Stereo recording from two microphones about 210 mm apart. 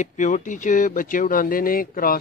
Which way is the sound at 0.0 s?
35° left (ahead or behind).